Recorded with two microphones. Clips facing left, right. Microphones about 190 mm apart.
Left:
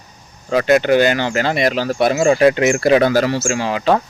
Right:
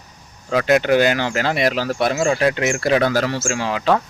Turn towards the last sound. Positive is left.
turn(degrees=0)  # may be behind; listen again after turning